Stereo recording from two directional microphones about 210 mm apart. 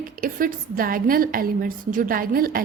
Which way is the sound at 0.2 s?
40° right (ahead or behind).